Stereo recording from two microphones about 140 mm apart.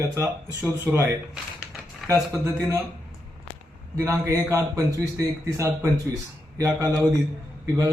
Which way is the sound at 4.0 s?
20° right (ahead or behind).